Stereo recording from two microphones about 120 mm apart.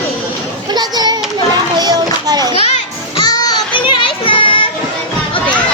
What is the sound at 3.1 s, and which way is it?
Children playing, 35° left (ahead or behind).